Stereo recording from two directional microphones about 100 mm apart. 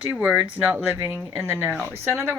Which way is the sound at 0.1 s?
15° right (ahead or behind).